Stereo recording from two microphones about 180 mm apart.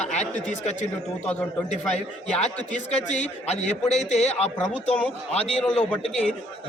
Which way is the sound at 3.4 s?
35° left (ahead or behind).